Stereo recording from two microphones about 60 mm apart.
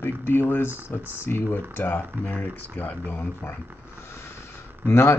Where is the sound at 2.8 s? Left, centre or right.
Left.